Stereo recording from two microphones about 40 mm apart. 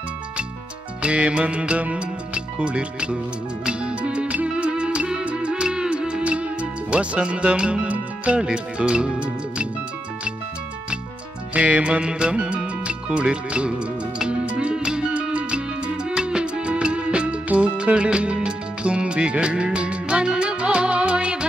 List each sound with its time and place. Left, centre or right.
1.0 s speech: right
3.6 s music: right
8.4 s speech: right
11.5 s speech: right
14.4 s music: right